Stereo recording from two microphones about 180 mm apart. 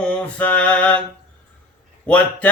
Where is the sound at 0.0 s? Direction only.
10° left (ahead or behind).